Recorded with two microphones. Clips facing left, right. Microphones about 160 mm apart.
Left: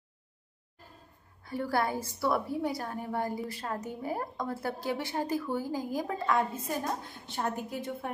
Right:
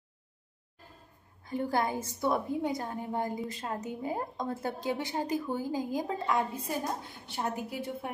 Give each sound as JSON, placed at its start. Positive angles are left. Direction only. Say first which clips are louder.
{"t": 1.5, "sound": "a woman's voice", "louder": "even", "side_deg": -20}